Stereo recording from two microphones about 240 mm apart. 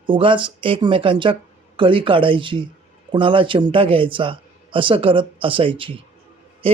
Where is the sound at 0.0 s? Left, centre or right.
Right.